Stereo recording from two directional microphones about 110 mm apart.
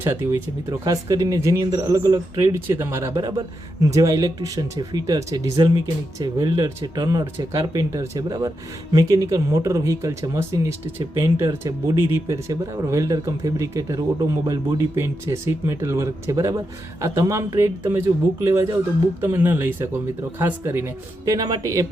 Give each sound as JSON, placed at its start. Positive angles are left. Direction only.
{"t": 0.0, "sound": "speech", "side_deg": -25}
{"t": 0.9, "sound": "speech", "side_deg": -35}
{"t": 3.2, "sound": "speech", "side_deg": -35}
{"t": 21.3, "sound": "speech", "side_deg": -35}